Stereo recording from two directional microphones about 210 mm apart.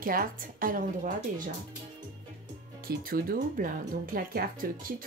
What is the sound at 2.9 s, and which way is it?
Speech, 45° right (ahead or behind).